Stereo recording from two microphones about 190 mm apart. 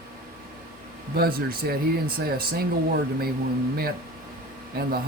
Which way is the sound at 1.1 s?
55° right (ahead or behind).